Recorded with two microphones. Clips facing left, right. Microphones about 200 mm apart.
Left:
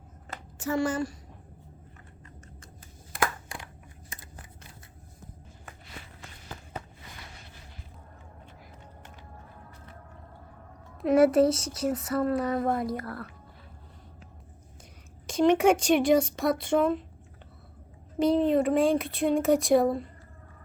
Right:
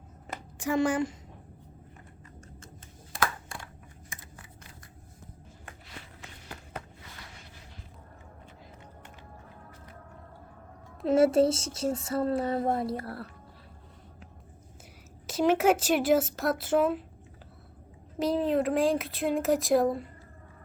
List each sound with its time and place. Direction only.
0.6 s a woman's voice: 15° right (ahead or behind)
3.2 s a sound: 20° left (ahead or behind)
11.0 s speech: 25° right (ahead or behind)
15.3 s speech: 5° right (ahead or behind)
18.2 s speech: centre (ahead or behind)